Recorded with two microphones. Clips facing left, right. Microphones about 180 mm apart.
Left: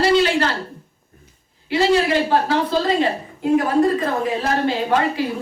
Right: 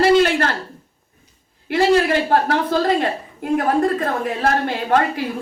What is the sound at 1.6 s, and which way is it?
A woman's voice, 55° right (ahead or behind).